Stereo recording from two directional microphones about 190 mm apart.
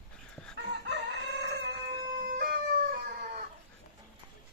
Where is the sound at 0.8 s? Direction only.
65° right (ahead or behind).